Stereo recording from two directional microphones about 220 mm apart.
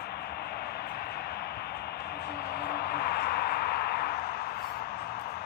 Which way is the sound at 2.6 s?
45° left (ahead or behind).